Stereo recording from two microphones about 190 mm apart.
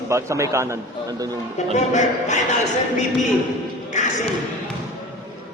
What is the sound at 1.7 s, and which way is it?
Speech, 40° left (ahead or behind).